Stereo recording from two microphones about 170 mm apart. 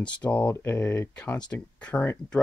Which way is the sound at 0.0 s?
10° left (ahead or behind).